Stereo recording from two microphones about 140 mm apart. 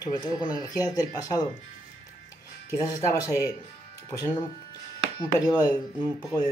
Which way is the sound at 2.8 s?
25° left (ahead or behind).